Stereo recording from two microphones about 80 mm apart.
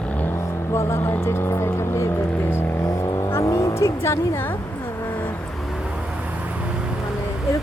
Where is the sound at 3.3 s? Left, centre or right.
Left.